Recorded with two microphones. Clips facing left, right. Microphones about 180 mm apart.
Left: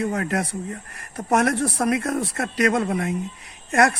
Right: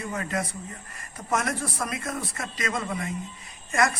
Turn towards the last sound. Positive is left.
turn(degrees=65)  # may be behind; listen again after turning